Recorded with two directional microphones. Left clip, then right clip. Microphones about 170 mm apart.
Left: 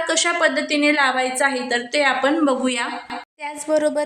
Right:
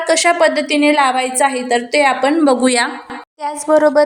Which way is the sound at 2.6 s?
35° right (ahead or behind).